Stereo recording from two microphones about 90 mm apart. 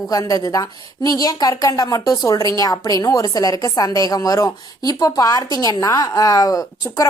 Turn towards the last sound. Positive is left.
turn(degrees=40)  # may be behind; listen again after turning